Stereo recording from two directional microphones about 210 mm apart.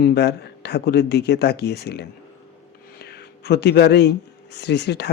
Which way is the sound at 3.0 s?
50° left (ahead or behind).